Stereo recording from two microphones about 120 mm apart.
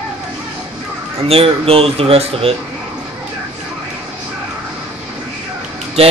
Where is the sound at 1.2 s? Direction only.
50° right (ahead or behind).